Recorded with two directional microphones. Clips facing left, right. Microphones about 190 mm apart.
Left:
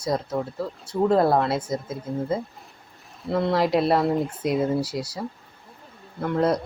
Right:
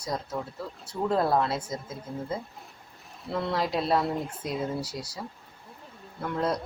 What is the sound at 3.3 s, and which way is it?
Speech, 55° left (ahead or behind).